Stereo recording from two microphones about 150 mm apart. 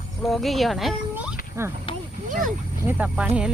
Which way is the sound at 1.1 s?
5° right (ahead or behind).